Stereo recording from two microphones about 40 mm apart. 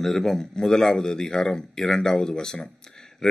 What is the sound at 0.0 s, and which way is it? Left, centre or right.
A man's voice, centre.